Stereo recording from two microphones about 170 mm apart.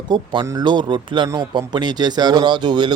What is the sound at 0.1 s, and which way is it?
Speech, 25° right (ahead or behind).